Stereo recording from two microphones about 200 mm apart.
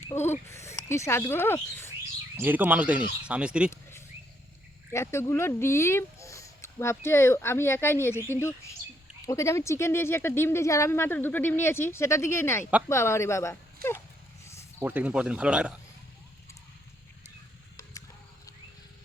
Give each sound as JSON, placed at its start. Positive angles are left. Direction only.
{"t": 0.1, "sound": "speech", "side_deg": 10}
{"t": 2.3, "sound": "speech", "side_deg": -10}
{"t": 3.7, "sound": "a sound", "side_deg": 10}
{"t": 4.9, "sound": "speech", "side_deg": 15}
{"t": 13.8, "sound": "a sound", "side_deg": -50}
{"t": 14.8, "sound": "speech", "side_deg": -10}